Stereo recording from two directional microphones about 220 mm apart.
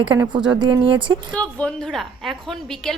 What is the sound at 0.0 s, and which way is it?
Speech, 20° right (ahead or behind).